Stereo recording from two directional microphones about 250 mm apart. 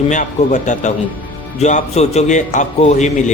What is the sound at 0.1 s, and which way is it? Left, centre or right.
A man's voice, left.